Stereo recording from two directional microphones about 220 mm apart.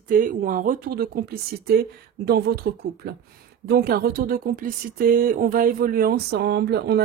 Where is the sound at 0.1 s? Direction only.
35° right (ahead or behind).